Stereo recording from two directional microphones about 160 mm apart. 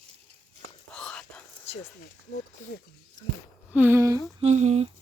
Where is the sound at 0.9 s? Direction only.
5° left (ahead or behind).